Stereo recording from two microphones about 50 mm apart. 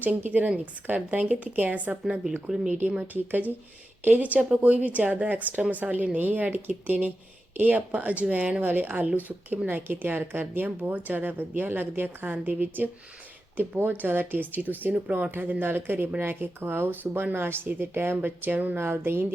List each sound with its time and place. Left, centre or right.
0.0 s a woman's voice: right
3.0 s a woman's voice: right
18.8 s speech: right